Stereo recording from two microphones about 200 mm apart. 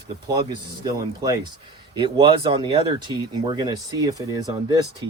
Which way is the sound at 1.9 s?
25° right (ahead or behind).